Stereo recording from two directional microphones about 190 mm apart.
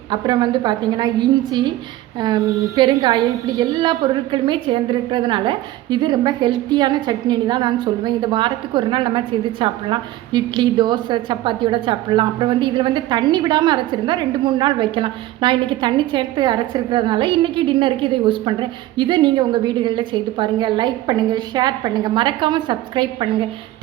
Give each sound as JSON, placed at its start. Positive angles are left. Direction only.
{"t": 0.1, "sound": "a woman's voice", "side_deg": -25}